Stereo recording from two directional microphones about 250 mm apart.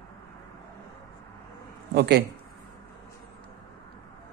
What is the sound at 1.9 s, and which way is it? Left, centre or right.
Speech, right.